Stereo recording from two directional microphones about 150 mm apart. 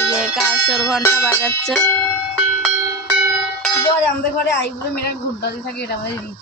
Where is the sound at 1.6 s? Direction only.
5° left (ahead or behind).